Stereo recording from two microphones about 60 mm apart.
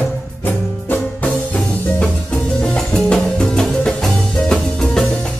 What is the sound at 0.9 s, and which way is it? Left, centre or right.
Music, left.